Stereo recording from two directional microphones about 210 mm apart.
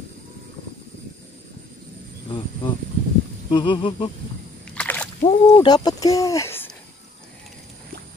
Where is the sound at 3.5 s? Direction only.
20° left (ahead or behind).